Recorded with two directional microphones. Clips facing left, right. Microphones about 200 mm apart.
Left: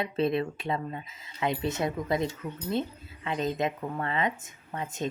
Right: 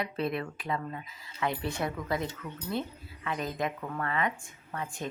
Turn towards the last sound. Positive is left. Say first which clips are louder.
# left 2 dB
turn(degrees=20)  # may be behind; listen again after turning